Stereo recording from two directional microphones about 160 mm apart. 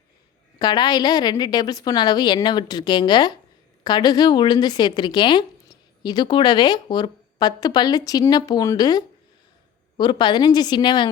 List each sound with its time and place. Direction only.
0.6 s speech: 25° left (ahead or behind)